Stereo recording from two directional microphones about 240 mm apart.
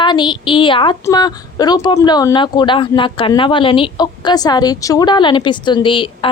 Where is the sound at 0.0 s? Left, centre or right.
Centre.